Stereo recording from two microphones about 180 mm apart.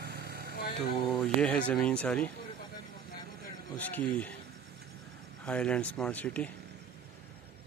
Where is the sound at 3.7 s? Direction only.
10° left (ahead or behind).